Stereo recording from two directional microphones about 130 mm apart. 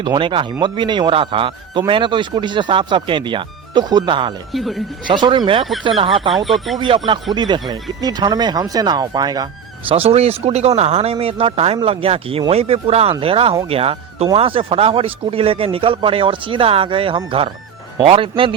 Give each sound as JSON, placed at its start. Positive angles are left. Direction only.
{"t": 0.0, "sound": "speech", "side_deg": -40}
{"t": 4.5, "sound": "speech", "side_deg": 0}
{"t": 5.0, "sound": "speech", "side_deg": -35}
{"t": 6.3, "sound": "speech", "side_deg": 0}
{"t": 6.7, "sound": "speech", "side_deg": -40}
{"t": 9.9, "sound": "speech", "side_deg": -50}